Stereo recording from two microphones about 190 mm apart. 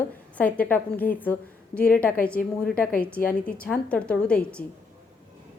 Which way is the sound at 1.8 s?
50° left (ahead or behind).